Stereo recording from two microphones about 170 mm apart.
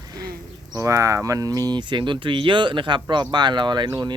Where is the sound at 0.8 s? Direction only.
20° right (ahead or behind).